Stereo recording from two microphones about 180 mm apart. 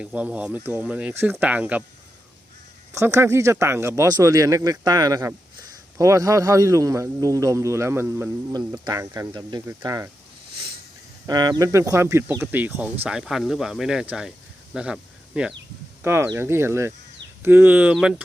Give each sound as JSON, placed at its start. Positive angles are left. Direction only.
{"t": 0.0, "sound": "a man's voice", "side_deg": -5}
{"t": 2.9, "sound": "a man's voice", "side_deg": -15}
{"t": 11.3, "sound": "a man's voice", "side_deg": -20}